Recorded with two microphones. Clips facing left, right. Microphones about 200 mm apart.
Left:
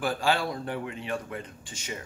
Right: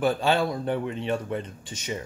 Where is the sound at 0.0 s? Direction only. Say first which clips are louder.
Right 4 dB; 25° right (ahead or behind).